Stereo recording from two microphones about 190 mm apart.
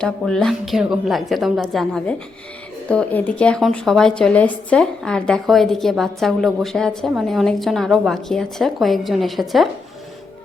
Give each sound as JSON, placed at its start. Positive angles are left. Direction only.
{"t": 0.0, "sound": "a woman's voice", "side_deg": 0}